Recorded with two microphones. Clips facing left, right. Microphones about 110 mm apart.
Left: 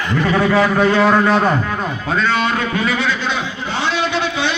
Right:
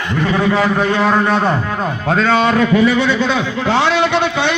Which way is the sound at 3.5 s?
90° right.